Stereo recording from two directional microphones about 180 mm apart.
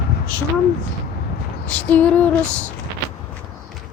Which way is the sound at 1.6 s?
10° left (ahead or behind).